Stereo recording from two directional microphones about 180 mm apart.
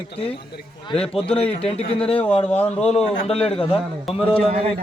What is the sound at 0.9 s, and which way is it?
Speech, 30° left (ahead or behind).